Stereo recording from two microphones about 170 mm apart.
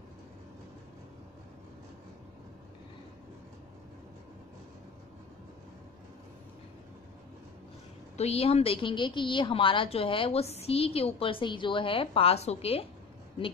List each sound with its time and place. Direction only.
8.2 s a woman's voice: 35° left (ahead or behind)